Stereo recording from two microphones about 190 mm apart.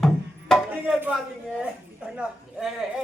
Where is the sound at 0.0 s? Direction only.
Centre (ahead or behind).